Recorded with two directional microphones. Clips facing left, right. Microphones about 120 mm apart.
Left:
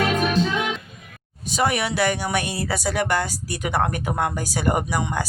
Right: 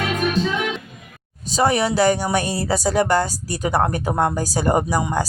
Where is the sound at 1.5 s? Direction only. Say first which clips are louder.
Right 4 dB; 35° right (ahead or behind).